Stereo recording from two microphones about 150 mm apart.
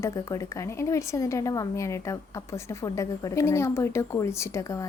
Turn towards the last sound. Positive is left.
turn(degrees=20)  # may be behind; listen again after turning